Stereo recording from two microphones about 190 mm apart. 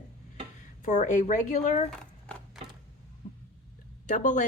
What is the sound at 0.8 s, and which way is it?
Speech, 40° left (ahead or behind).